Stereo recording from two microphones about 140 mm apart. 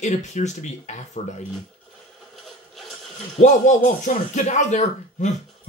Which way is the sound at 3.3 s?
55° left (ahead or behind).